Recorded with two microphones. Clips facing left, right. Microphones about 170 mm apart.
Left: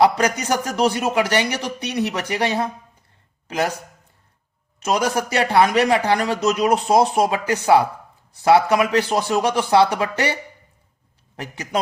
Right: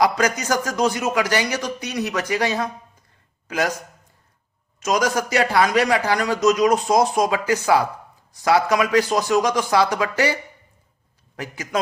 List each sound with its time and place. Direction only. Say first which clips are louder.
0.0 s a man's voice: left 2 dB; 30° left (ahead or behind)
4.9 s a man's voice: even; 30° left (ahead or behind)
11.3 s a man's voice: even; 30° left (ahead or behind)